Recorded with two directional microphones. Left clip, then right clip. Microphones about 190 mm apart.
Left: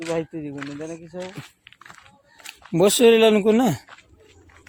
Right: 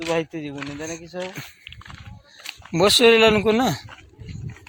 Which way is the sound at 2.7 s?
35° left (ahead or behind).